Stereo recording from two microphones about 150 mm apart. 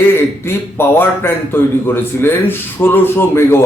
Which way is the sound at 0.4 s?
15° left (ahead or behind).